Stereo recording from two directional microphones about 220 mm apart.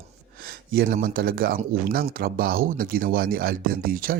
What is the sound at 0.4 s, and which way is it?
Speech, 40° right (ahead or behind).